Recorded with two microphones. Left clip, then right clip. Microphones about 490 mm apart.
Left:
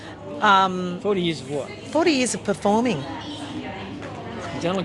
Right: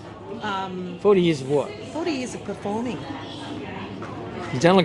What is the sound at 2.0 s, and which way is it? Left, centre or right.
Speech, left.